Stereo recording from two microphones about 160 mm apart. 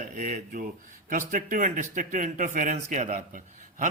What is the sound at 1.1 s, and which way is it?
Speech, 55° right (ahead or behind).